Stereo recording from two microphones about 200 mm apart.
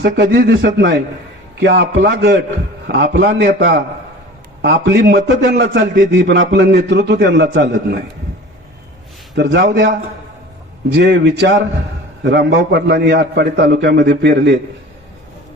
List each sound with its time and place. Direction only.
0.0 s a man's voice: 55° right (ahead or behind)
9.3 s a man's voice: 60° right (ahead or behind)
10.9 s a man's voice: 60° right (ahead or behind)